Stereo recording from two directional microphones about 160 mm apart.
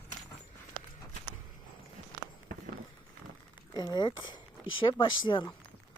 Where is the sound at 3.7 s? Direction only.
25° left (ahead or behind).